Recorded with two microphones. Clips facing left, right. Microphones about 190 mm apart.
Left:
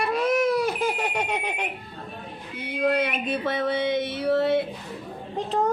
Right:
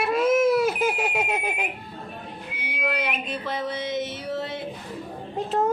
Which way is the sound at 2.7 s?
50° left (ahead or behind).